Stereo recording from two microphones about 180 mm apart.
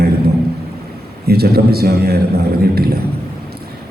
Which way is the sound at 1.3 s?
60° right (ahead or behind).